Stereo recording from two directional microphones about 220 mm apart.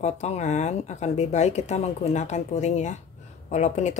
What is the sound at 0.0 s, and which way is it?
Speech, 30° left (ahead or behind).